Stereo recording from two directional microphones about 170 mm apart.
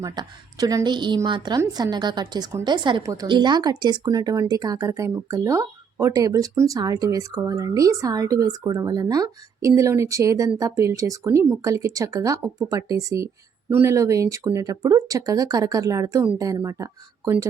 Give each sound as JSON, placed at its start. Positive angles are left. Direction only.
{"t": 0.0, "sound": "a woman's voice", "side_deg": -20}